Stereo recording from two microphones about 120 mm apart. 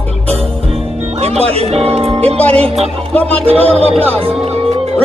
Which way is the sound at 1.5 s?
55° right (ahead or behind).